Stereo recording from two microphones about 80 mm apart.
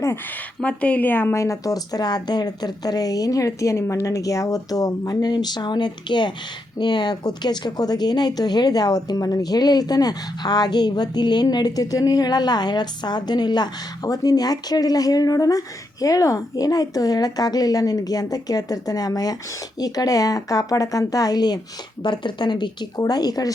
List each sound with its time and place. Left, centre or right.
0.6 s a woman's voice: centre
1.4 s speech: left
22.0 s speech: left